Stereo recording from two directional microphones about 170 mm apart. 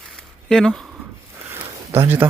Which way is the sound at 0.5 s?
5° left (ahead or behind).